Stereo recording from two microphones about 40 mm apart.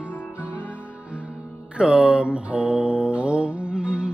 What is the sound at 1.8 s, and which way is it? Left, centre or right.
Music, right.